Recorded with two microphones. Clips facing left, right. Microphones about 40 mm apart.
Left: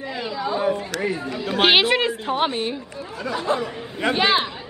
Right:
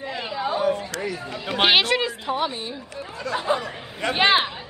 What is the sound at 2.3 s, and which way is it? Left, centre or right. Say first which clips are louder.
Speech: left 5 dB; left.